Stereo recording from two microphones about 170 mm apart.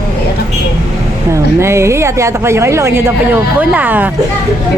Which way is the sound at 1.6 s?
15° right (ahead or behind).